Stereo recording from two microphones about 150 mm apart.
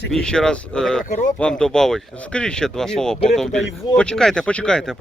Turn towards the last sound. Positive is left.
turn(degrees=5)  # may be behind; listen again after turning